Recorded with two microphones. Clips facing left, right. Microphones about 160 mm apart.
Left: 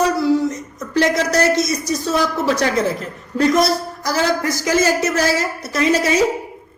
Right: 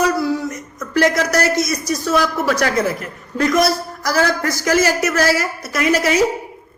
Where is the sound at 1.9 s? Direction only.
25° left (ahead or behind).